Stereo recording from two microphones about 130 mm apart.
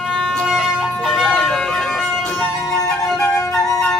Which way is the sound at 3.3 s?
25° left (ahead or behind).